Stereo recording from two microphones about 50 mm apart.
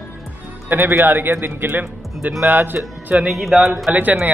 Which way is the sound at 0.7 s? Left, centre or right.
Right.